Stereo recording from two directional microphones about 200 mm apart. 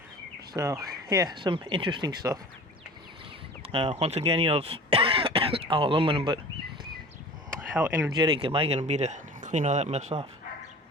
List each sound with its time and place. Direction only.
0.5 s speech: 15° right (ahead or behind)
3.7 s speech: 30° right (ahead or behind)
7.8 s speech: 5° right (ahead or behind)
8.1 s speech: 25° right (ahead or behind)